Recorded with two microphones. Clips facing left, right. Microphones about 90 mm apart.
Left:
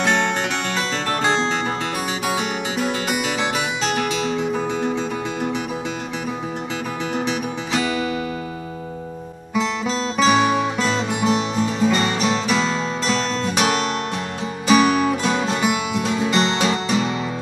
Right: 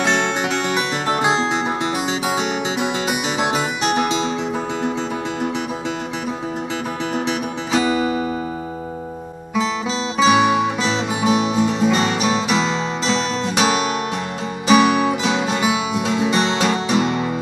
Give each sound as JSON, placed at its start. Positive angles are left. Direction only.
{"t": 0.0, "sound": "music", "side_deg": -15}
{"t": 4.8, "sound": "music", "side_deg": -15}
{"t": 7.2, "sound": "music", "side_deg": -15}
{"t": 9.6, "sound": "music", "side_deg": -5}
{"t": 13.6, "sound": "guitar", "side_deg": 0}
{"t": 14.7, "sound": "music", "side_deg": 0}